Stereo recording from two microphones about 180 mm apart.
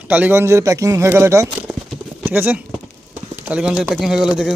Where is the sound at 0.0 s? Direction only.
10° right (ahead or behind).